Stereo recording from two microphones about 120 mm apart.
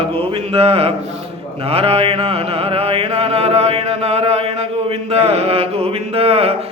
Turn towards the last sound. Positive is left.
turn(degrees=-55)  # may be behind; listen again after turning